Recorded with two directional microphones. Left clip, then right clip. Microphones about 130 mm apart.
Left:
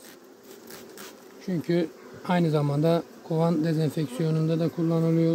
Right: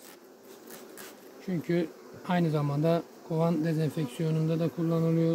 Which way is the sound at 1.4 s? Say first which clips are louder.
Left 4 dB; 30° left (ahead or behind).